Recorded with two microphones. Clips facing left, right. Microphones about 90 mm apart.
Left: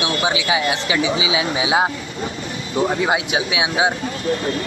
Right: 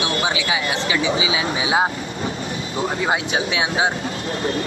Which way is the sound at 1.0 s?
35° right (ahead or behind).